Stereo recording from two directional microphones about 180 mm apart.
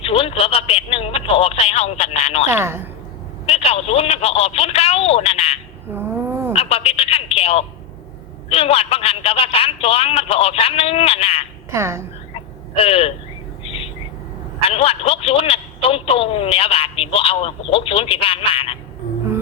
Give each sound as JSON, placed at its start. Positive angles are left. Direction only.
{"t": 0.0, "sound": "speech", "side_deg": 30}
{"t": 2.5, "sound": "a woman's voice", "side_deg": -15}
{"t": 3.5, "sound": "speech", "side_deg": 35}
{"t": 5.9, "sound": "a sound", "side_deg": -10}
{"t": 6.5, "sound": "speech", "side_deg": 35}
{"t": 11.7, "sound": "a woman's voice", "side_deg": -15}
{"t": 12.3, "sound": "a sound", "side_deg": 30}
{"t": 14.7, "sound": "speech", "side_deg": 35}